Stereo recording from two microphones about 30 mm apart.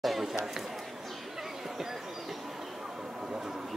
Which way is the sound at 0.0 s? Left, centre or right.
Centre.